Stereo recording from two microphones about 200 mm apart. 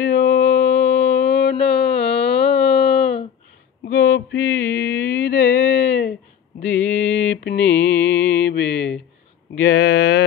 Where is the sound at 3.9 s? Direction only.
50° left (ahead or behind).